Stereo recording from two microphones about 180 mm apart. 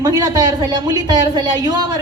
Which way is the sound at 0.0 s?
20° right (ahead or behind).